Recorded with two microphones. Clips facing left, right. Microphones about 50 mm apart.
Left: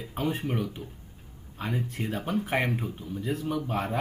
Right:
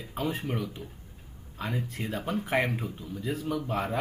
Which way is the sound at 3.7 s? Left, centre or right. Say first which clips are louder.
Right 1 dB; centre.